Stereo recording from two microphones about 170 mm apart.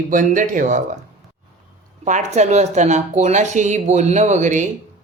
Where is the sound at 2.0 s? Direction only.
45° right (ahead or behind).